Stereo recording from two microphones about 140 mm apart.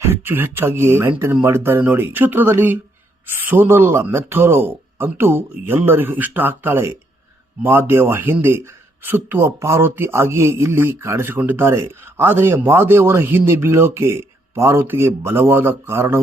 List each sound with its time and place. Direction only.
0.0 s speech: 15° right (ahead or behind)